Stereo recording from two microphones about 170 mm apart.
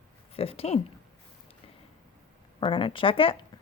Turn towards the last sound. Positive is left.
turn(degrees=30)  # may be behind; listen again after turning